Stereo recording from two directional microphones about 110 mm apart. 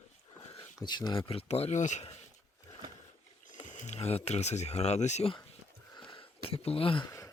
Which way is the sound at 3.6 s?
90° left.